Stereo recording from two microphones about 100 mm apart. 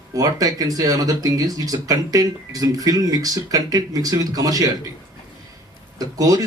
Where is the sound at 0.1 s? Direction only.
35° right (ahead or behind).